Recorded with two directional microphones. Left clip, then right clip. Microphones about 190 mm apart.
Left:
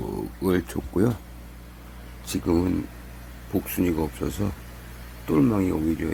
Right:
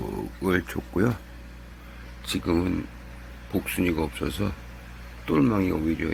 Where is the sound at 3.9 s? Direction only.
Centre (ahead or behind).